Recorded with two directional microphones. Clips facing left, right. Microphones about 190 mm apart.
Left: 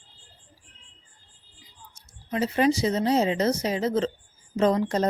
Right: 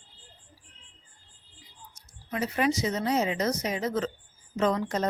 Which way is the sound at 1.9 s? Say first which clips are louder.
Left 5 dB; 25° left (ahead or behind).